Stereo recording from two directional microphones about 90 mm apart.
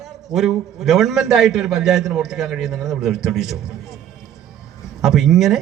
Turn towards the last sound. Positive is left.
turn(degrees=-5)  # may be behind; listen again after turning